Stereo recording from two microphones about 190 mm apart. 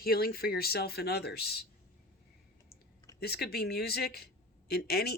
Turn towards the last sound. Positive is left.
turn(degrees=55)  # may be behind; listen again after turning